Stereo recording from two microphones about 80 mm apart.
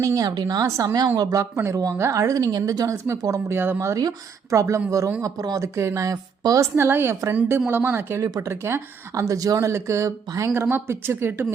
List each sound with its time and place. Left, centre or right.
0.0 s a woman's voice: right
0.3 s a woman's voice: right
1.0 s a woman's voice: right
1.3 s a woman's voice: right
6.7 s speech: right
9.6 s speech: right